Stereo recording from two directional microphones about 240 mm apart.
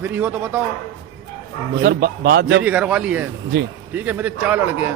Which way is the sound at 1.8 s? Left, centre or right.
Right.